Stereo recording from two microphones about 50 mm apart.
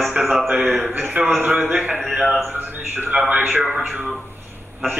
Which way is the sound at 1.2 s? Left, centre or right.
Right.